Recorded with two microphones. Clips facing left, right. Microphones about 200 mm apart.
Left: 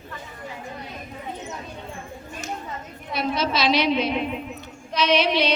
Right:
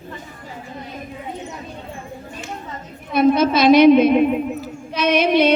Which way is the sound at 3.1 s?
50° right (ahead or behind).